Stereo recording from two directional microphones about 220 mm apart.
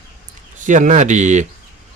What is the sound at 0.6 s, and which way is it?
Speech, 35° right (ahead or behind).